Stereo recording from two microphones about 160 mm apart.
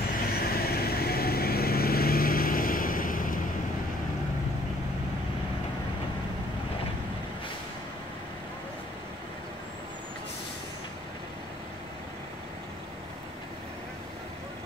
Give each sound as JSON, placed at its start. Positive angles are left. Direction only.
{"t": 0.3, "sound": "vehicle", "side_deg": 70}